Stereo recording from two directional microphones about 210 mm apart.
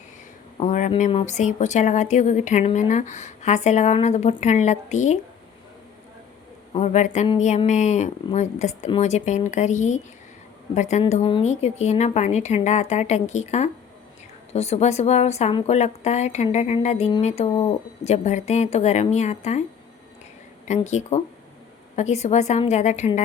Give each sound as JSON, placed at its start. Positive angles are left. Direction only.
{"t": 0.6, "sound": "speech", "side_deg": 35}
{"t": 6.7, "sound": "speech", "side_deg": 35}
{"t": 20.7, "sound": "speech", "side_deg": 35}